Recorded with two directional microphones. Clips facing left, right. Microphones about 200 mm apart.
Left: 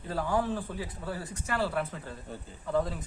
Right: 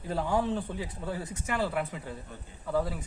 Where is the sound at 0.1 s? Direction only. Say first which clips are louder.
Right 1 dB; 20° right (ahead or behind).